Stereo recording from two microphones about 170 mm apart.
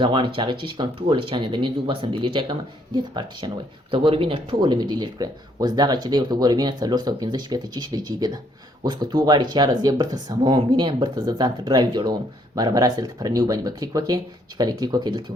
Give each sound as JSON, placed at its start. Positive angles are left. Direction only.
{"t": 0.0, "sound": "speech", "side_deg": -30}